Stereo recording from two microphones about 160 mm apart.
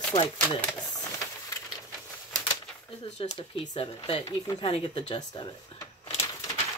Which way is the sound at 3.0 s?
35° left (ahead or behind).